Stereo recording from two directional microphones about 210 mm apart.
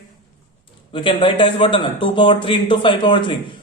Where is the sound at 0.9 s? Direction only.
25° left (ahead or behind).